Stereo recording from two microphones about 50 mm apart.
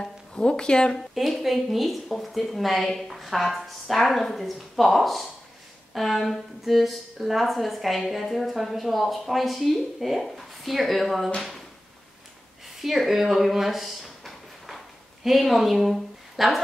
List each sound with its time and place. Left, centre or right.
0.0 s speech: centre
0.9 s a woman's voice: centre
12.8 s a sound: centre
15.2 s a woman's voice: centre